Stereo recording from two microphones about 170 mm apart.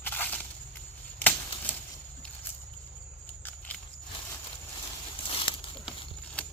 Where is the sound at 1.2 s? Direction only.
10° left (ahead or behind).